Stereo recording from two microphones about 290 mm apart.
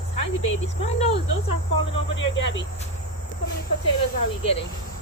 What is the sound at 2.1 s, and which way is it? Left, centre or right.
Speech, left.